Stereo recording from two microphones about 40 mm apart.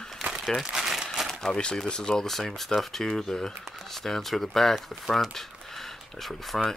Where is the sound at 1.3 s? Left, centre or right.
Centre.